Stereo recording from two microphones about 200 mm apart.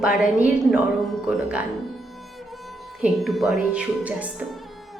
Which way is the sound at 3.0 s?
Centre (ahead or behind).